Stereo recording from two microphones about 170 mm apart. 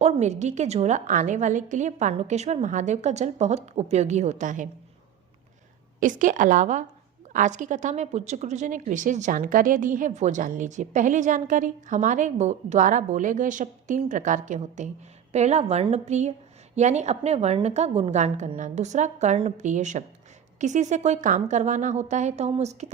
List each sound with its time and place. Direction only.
0.0 s a woman's voice: 40° right (ahead or behind)
6.0 s a woman's voice: 50° right (ahead or behind)